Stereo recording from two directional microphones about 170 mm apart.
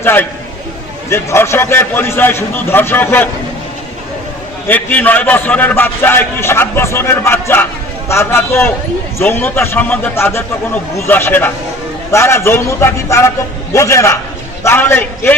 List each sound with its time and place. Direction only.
0.0 s a man's voice: 10° left (ahead or behind)
4.7 s a man's voice: 10° left (ahead or behind)